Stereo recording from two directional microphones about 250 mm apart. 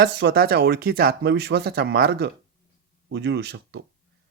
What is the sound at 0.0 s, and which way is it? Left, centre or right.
Speech, right.